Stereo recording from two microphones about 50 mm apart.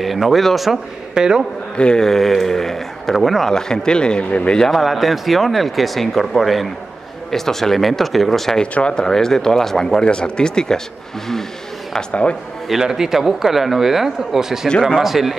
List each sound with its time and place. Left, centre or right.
0.0 s speech: centre
1.1 s a man's voice: centre
1.8 s speech: centre
4.7 s speech: centre
8.7 s speech: centre
10.0 s speech: centre
12.1 s speech: left
12.6 s speech: centre